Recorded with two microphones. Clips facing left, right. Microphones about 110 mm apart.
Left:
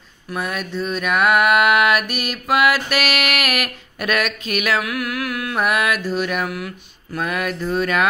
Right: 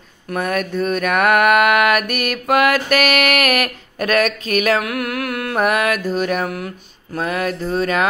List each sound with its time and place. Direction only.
0.3 s mantra: 50° right (ahead or behind); by 8.1 s 35° right (ahead or behind)